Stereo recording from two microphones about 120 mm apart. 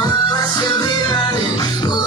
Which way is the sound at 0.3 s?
35° left (ahead or behind).